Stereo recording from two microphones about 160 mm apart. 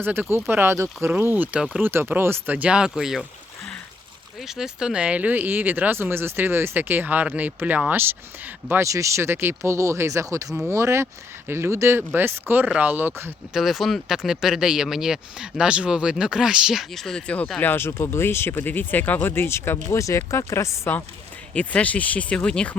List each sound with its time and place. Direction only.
0.0 s speech: 15° right (ahead or behind)
4.4 s speech: centre (ahead or behind)
13.5 s speech: centre (ahead or behind)